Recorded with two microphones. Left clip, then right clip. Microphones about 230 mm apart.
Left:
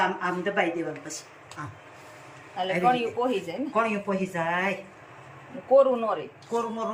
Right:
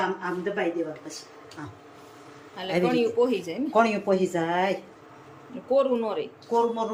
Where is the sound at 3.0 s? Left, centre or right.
Centre.